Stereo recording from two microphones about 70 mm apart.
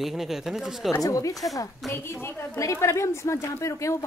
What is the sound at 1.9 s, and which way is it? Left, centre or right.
A woman's voice, left.